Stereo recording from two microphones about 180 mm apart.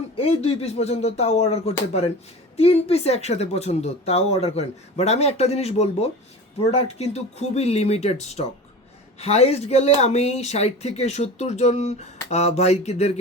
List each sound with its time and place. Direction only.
0.2 s speech: 35° left (ahead or behind)